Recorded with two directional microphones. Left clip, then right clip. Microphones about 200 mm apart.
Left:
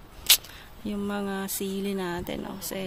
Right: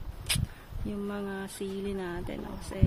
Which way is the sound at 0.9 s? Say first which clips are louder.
Left 5 dB; 35° left (ahead or behind).